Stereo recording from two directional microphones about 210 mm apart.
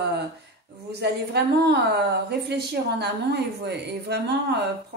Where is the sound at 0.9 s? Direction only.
50° right (ahead or behind).